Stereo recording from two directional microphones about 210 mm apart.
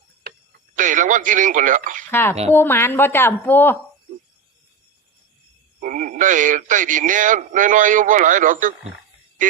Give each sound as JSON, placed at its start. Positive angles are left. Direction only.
{"t": 0.8, "sound": "speech", "side_deg": -40}
{"t": 2.0, "sound": "a woman's voice", "side_deg": 10}
{"t": 5.8, "sound": "speech", "side_deg": -40}